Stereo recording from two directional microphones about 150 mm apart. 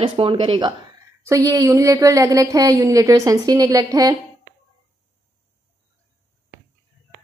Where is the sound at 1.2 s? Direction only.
20° right (ahead or behind).